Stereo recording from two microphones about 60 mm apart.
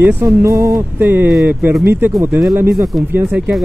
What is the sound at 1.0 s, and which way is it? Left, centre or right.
Speech, right.